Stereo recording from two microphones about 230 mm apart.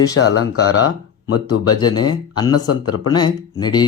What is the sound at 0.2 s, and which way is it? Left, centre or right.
Speech, left.